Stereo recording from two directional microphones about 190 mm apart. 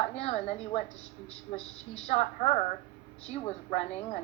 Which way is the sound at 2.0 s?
35° left (ahead or behind).